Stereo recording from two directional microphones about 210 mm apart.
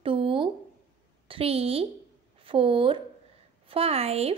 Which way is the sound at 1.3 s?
25° right (ahead or behind).